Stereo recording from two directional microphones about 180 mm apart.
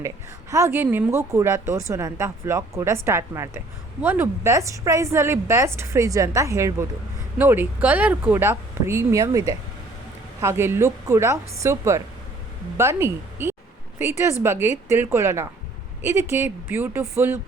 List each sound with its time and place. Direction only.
0.5 s a woman's voice: 15° right (ahead or behind)
10.4 s a woman's voice: 15° right (ahead or behind)